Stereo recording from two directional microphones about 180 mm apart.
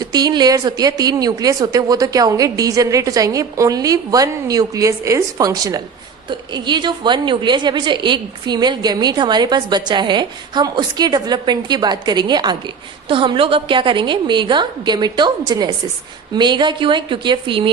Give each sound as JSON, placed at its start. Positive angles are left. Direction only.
{"t": 0.0, "sound": "a woman's voice", "side_deg": -20}